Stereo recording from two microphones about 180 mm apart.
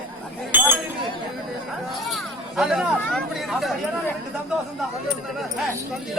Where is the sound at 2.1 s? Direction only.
Centre (ahead or behind).